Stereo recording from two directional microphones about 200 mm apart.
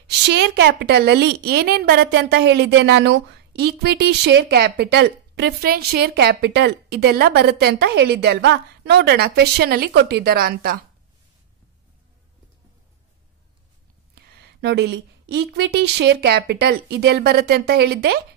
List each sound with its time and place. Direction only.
0.0 s a woman's voice: 55° right (ahead or behind)
14.1 s a sound: 55° right (ahead or behind)
15.3 s a woman's voice: 55° right (ahead or behind)